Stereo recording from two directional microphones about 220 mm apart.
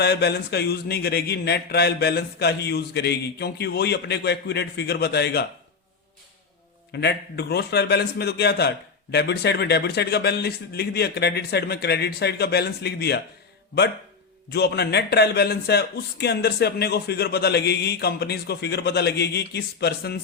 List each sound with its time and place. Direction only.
0.0 s a man's voice: 50° left (ahead or behind)
6.9 s a man's voice: 50° left (ahead or behind)
14.5 s a man's voice: 50° left (ahead or behind)